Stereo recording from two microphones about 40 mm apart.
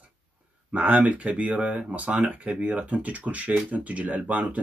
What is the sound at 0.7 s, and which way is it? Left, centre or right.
Speech, right.